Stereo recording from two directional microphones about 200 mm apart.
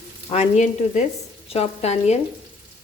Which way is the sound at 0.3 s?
35° left (ahead or behind).